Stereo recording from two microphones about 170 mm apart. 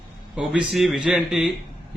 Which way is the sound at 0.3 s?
5° right (ahead or behind).